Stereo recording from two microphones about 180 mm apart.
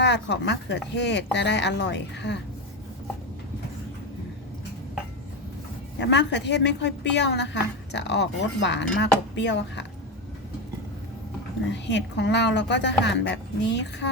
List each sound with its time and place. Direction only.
0.0 s a woman's voice: 70° left (ahead or behind)
6.0 s a woman's voice: 70° left (ahead or behind)
11.7 s a woman's voice: 75° left (ahead or behind)